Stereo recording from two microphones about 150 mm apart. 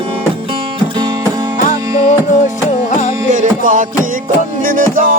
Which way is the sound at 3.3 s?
55° right (ahead or behind).